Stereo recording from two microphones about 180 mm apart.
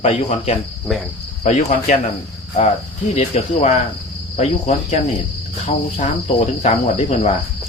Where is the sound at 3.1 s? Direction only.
40° left (ahead or behind).